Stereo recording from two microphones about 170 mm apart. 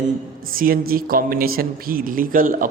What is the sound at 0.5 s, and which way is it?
Speech, 60° right (ahead or behind).